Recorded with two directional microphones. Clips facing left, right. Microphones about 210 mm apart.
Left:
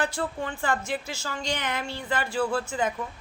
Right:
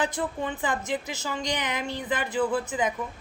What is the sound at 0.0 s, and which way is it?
Speech, 20° right (ahead or behind).